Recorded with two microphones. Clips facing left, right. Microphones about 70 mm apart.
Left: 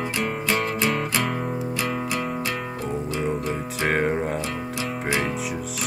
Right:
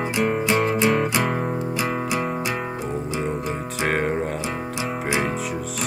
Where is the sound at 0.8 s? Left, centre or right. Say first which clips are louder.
Right 4 dB; centre.